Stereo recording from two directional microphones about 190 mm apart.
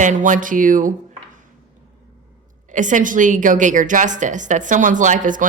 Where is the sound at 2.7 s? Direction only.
40° right (ahead or behind).